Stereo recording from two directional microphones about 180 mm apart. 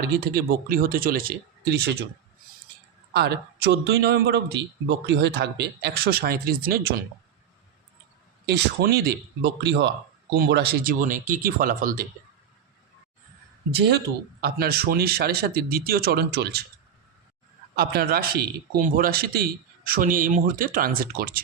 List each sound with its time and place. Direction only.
0.3 s speech: 55° right (ahead or behind)
3.1 s speech: 65° right (ahead or behind)
8.4 s speech: 60° right (ahead or behind)
13.7 s speech: 65° right (ahead or behind)
17.7 s a man's voice: 55° right (ahead or behind)